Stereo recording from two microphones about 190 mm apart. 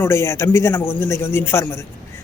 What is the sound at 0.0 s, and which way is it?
A man's voice, 15° left (ahead or behind).